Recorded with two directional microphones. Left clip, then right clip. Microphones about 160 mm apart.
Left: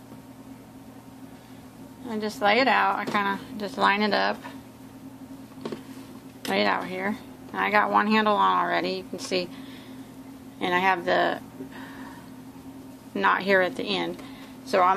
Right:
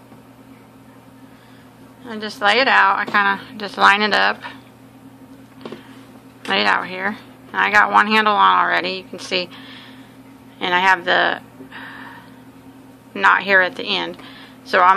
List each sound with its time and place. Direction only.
2.0 s speech: 10° left (ahead or behind)
6.5 s speech: 10° left (ahead or behind)
13.1 s speech: 20° left (ahead or behind); by 15.0 s 5° left (ahead or behind)